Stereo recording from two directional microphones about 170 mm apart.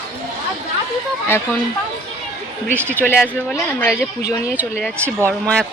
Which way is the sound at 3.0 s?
10° left (ahead or behind).